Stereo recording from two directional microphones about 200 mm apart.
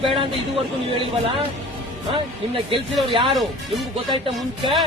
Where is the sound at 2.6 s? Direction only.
25° right (ahead or behind).